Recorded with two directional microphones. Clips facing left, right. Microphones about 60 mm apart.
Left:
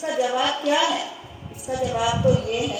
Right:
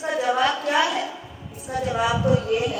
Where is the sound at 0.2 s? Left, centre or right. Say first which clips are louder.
Right 1 dB; right.